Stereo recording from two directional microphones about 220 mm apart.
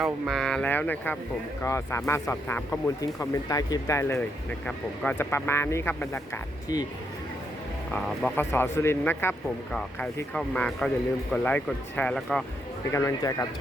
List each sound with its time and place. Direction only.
0.0 s speech: centre (ahead or behind)
7.9 s speech: 5° left (ahead or behind)
12.9 s speech: 15° left (ahead or behind)